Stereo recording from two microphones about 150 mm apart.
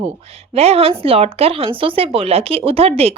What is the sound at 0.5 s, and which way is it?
A woman's voice, 45° right (ahead or behind).